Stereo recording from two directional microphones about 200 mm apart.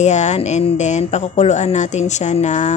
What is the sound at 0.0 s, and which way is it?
Speech, 35° left (ahead or behind).